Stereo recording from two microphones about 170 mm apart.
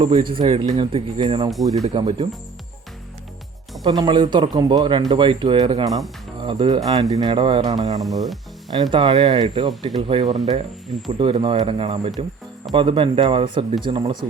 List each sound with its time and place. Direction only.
0.0 s speech: 30° right (ahead or behind)
1.7 s speech: 40° right (ahead or behind)
3.8 s speech: 25° right (ahead or behind)
8.0 s speech: centre (ahead or behind)
8.7 s speech: 25° right (ahead or behind)
10.3 s speech: 40° right (ahead or behind)
11.2 s speech: 30° right (ahead or behind)